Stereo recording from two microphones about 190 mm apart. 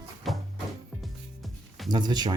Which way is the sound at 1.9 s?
20° right (ahead or behind).